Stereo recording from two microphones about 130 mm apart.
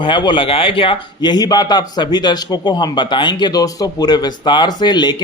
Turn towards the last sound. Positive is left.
turn(degrees=35)  # may be behind; listen again after turning